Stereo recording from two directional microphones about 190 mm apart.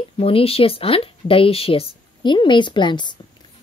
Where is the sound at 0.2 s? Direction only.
30° left (ahead or behind).